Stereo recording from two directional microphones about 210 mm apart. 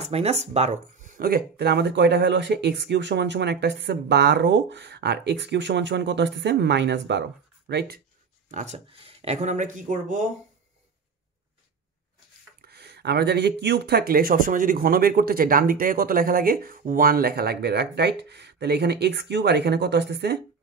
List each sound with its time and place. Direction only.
0.0 s speech: 30° right (ahead or behind); by 8.0 s 55° right (ahead or behind)
8.5 s speech: 35° right (ahead or behind)
12.6 s speech: 50° right (ahead or behind)